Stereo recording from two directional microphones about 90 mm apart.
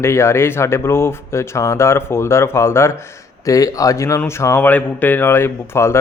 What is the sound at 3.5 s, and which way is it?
A man's voice, 40° left (ahead or behind).